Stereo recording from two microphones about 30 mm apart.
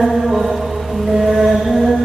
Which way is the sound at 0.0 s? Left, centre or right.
Centre.